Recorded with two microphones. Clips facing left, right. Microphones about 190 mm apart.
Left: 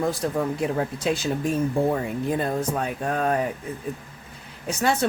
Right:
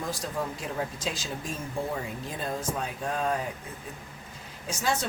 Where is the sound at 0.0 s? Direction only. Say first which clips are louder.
Left 8 dB; 60° left (ahead or behind).